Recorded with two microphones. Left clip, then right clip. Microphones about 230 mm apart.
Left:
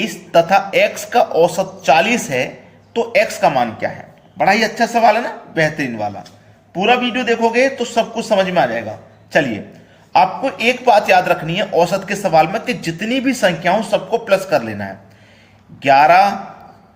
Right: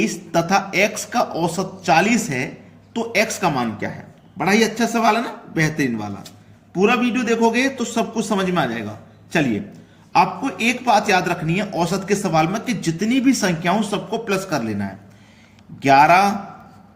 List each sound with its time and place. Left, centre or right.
0.0 s a man's voice: right
10.1 s a man's voice: right